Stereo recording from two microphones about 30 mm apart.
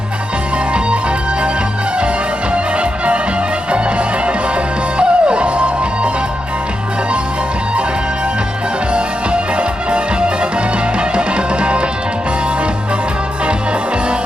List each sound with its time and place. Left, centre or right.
2.5 s music: right
8.9 s music: right